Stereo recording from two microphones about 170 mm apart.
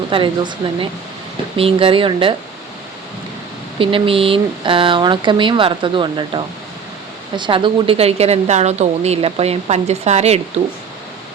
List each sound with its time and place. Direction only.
0.1 s a woman's voice: 30° right (ahead or behind)
3.8 s a woman's voice: 30° right (ahead or behind)